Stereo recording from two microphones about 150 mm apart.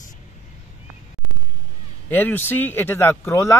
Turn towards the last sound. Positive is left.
turn(degrees=15)  # may be behind; listen again after turning